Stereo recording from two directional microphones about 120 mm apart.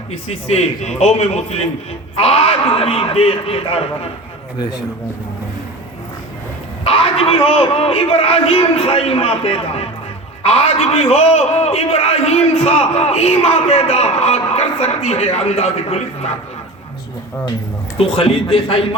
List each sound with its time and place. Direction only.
0.3 s a man's voice: 65° left (ahead or behind)
6.8 s a man's voice: 55° left (ahead or behind)
17.9 s a man's voice: 50° left (ahead or behind)